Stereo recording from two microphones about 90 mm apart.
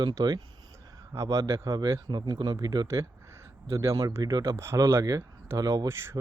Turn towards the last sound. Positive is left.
turn(degrees=-30)  # may be behind; listen again after turning